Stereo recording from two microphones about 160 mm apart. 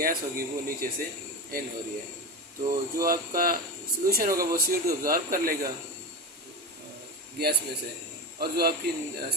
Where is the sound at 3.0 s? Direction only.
60° right (ahead or behind).